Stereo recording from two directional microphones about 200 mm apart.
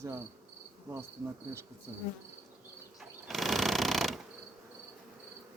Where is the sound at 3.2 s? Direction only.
Centre (ahead or behind).